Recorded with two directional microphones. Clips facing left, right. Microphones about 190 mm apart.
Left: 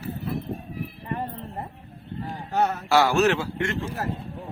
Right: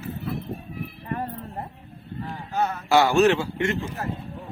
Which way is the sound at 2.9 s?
Centre (ahead or behind).